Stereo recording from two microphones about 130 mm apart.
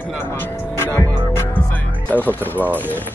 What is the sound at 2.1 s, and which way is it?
Speech, 15° left (ahead or behind).